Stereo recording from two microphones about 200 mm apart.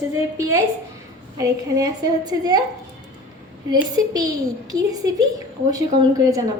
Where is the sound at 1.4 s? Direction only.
15° right (ahead or behind).